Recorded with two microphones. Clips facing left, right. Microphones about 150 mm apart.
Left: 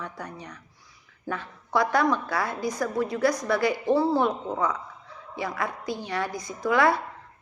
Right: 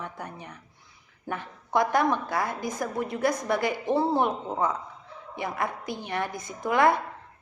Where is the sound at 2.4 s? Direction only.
50° right (ahead or behind).